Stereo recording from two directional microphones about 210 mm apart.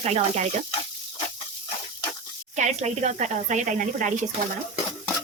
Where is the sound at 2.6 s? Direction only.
35° right (ahead or behind).